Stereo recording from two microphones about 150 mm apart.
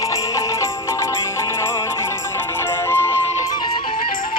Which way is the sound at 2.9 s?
15° left (ahead or behind).